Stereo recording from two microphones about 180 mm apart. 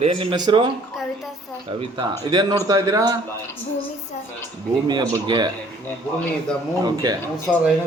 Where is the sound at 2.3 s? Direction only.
20° right (ahead or behind).